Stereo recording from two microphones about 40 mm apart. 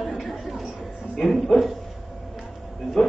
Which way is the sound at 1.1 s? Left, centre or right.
Centre.